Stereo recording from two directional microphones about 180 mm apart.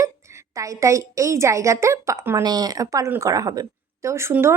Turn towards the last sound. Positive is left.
turn(degrees=-15)  # may be behind; listen again after turning